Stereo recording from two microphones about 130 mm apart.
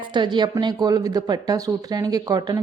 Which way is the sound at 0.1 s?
35° right (ahead or behind).